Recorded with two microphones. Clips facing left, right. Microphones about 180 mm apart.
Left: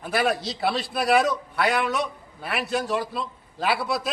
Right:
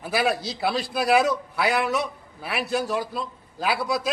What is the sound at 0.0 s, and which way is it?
A man's voice, 5° right (ahead or behind).